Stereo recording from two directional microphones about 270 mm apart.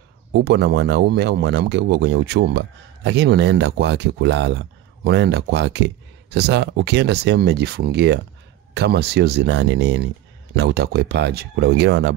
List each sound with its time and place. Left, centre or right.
0.3 s speech: right